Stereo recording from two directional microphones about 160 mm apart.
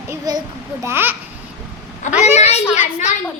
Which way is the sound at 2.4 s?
45° left (ahead or behind).